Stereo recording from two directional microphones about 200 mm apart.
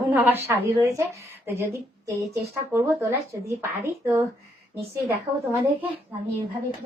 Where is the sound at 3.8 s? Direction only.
15° right (ahead or behind).